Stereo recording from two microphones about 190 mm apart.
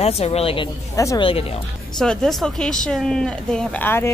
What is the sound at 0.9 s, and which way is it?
Speech, 20° left (ahead or behind).